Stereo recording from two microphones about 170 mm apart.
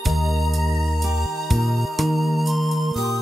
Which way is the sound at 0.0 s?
Centre (ahead or behind).